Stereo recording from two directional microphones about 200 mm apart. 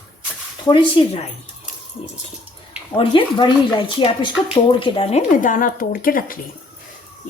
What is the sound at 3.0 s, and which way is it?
Speech, 25° left (ahead or behind).